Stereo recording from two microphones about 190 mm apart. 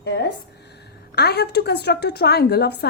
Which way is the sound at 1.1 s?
60° left (ahead or behind).